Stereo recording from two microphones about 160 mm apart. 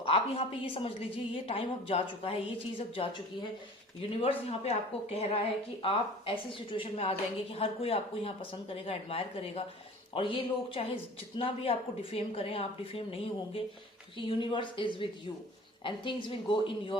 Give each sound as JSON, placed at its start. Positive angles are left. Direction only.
{"t": 0.0, "sound": "a woman's voice", "side_deg": 35}
{"t": 4.2, "sound": "a woman's voice", "side_deg": 40}